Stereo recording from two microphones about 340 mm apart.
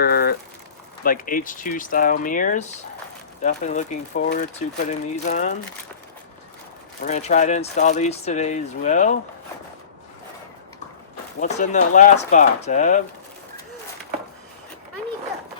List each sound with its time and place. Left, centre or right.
0.0 s a sound: left
1.0 s speech: left
7.0 s speech: left
11.3 s speech: left